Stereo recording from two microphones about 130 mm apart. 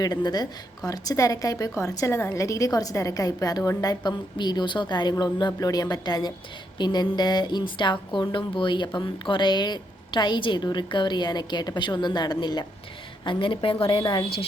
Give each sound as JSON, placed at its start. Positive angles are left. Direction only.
{"t": 0.0, "sound": "a woman's voice", "side_deg": 30}